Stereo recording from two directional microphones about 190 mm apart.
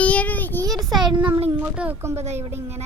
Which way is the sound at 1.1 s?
5° right (ahead or behind).